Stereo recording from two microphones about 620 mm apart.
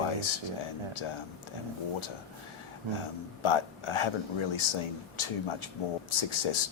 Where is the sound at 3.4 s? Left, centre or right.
Left.